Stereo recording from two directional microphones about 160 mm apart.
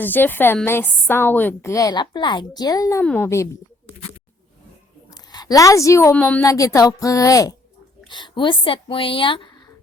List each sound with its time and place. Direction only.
0.0 s a woman's voice: 10° left (ahead or behind)
3.0 s a woman's voice: 10° left (ahead or behind)
5.1 s a woman's voice: 25° left (ahead or behind)